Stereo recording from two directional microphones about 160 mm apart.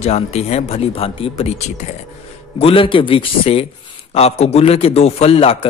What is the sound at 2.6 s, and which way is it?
Speech, 35° left (ahead or behind).